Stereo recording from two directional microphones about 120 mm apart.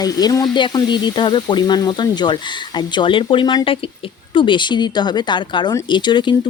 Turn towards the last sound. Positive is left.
turn(degrees=40)  # may be behind; listen again after turning